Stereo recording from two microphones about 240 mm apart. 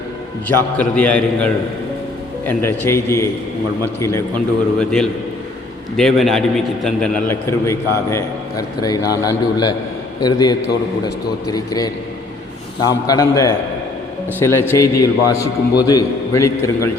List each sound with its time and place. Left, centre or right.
0.4 s a man's voice: centre